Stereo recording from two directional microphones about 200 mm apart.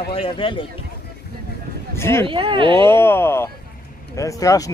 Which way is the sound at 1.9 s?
15° left (ahead or behind).